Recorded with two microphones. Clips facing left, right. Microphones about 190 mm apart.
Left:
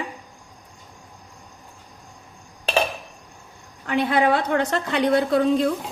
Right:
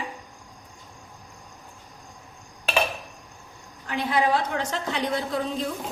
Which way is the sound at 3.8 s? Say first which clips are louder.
Left 4 dB; 60° left (ahead or behind).